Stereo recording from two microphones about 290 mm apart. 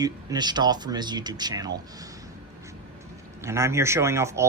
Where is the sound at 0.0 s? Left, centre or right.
Centre.